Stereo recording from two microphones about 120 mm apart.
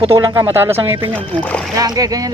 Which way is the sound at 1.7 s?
30° right (ahead or behind).